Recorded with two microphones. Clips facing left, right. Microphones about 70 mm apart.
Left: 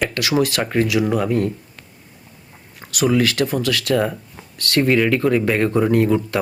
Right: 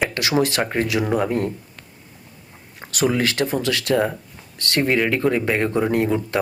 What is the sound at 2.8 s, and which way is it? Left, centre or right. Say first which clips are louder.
Speech: left 3 dB; right.